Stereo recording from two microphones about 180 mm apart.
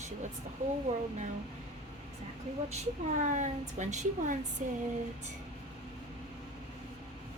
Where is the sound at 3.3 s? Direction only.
40° right (ahead or behind).